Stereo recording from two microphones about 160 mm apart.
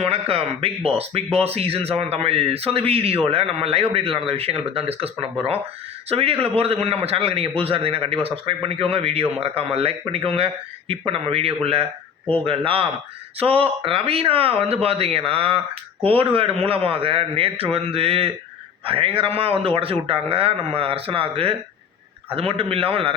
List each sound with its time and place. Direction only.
0.0 s a man's voice: 40° right (ahead or behind)